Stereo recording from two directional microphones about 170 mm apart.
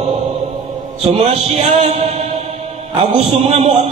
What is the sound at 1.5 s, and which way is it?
Speech, 40° right (ahead or behind).